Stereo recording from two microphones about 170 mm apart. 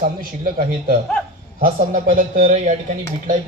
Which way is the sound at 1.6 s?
55° right (ahead or behind).